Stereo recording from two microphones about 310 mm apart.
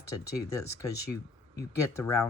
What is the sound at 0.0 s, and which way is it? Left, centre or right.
Speech, centre.